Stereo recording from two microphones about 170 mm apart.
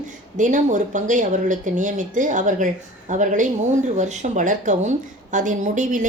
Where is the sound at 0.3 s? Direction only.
45° right (ahead or behind).